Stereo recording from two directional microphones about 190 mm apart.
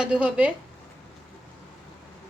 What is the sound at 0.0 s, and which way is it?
Speech, 5° right (ahead or behind).